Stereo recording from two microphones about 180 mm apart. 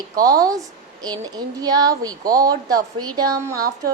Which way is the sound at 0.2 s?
20° right (ahead or behind).